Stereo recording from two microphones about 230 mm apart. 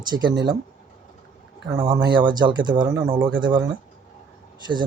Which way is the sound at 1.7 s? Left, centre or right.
Centre.